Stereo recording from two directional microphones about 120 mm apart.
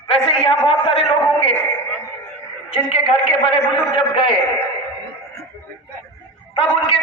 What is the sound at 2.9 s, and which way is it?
A man's voice, 55° left (ahead or behind).